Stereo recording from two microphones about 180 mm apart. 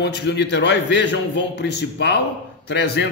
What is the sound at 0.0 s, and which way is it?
A man's voice, 70° left (ahead or behind).